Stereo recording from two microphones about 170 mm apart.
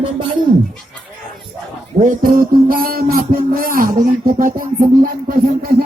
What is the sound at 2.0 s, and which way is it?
Music, 50° right (ahead or behind).